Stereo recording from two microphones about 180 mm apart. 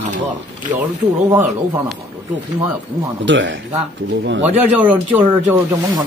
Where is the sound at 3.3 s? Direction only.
90° right.